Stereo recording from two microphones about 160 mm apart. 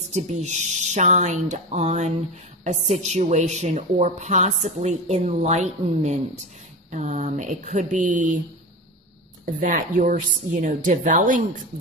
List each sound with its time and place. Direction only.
0.1 s a woman's voice: 45° right (ahead or behind)
9.5 s a woman's voice: 55° right (ahead or behind)